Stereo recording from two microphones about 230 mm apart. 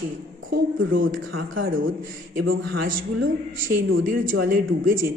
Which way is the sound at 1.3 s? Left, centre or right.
Right.